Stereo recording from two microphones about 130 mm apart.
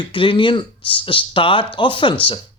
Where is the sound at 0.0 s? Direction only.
40° left (ahead or behind).